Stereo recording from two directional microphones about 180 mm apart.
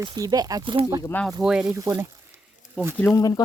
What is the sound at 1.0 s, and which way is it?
Speech, 10° left (ahead or behind).